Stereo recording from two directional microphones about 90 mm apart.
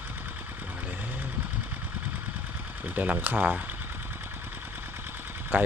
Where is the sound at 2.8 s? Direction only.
20° right (ahead or behind).